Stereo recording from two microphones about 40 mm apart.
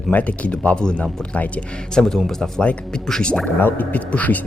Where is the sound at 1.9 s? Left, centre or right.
Centre.